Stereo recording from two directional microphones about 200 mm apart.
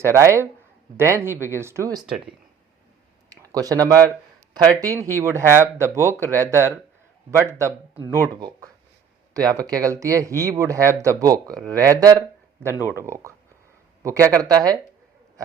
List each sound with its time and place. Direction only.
0.0 s speech: 15° right (ahead or behind)
3.2 s a sound: 20° right (ahead or behind)
4.8 s speech: 15° right (ahead or behind)